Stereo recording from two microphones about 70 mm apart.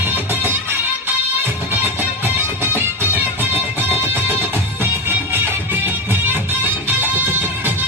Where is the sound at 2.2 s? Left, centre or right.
Right.